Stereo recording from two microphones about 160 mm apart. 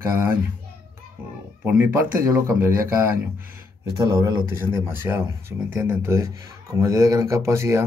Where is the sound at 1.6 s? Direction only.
15° right (ahead or behind).